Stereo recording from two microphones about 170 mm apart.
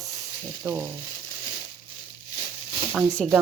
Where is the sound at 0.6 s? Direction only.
15° right (ahead or behind).